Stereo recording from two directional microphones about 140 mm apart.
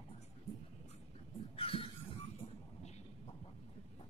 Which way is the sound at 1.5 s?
40° left (ahead or behind).